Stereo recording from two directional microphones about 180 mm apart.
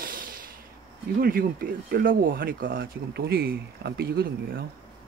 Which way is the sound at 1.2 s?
55° right (ahead or behind).